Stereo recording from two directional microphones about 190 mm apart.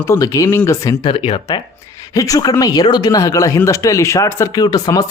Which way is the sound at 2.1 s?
20° left (ahead or behind).